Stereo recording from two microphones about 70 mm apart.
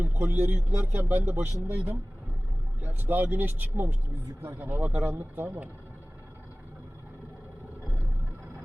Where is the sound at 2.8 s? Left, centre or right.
Right.